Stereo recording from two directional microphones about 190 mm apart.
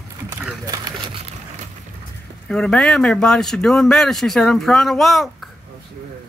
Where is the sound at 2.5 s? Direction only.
5° left (ahead or behind).